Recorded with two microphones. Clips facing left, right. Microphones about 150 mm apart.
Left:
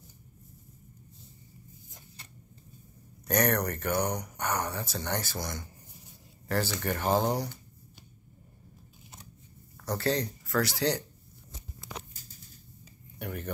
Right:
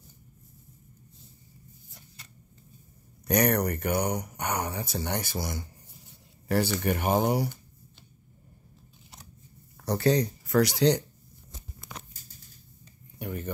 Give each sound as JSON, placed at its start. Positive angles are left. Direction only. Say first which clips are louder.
{"t": 3.3, "sound": "speech", "louder": "right 3 dB", "side_deg": -10}
{"t": 9.8, "sound": "speech", "louder": "right 5 dB", "side_deg": -15}
{"t": 13.2, "sound": "speech", "louder": "right 2 dB", "side_deg": -5}